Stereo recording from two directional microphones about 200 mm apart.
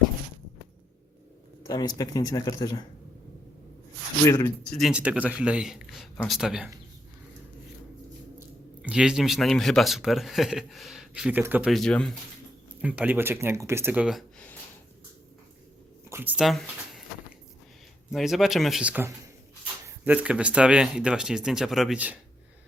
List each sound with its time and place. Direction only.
1.6 s speech: 20° left (ahead or behind)
4.7 s speech: centre (ahead or behind)
8.4 s speech: 5° right (ahead or behind)
12.8 s speech: 5° right (ahead or behind)
16.0 s a sound: 10° right (ahead or behind)
16.4 s speech: centre (ahead or behind)
18.1 s speech: centre (ahead or behind)